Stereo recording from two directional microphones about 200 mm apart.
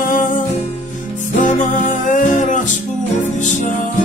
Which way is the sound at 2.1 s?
40° left (ahead or behind).